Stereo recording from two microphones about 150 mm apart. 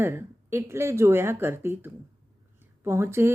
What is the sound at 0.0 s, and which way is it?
A woman's voice, 15° right (ahead or behind).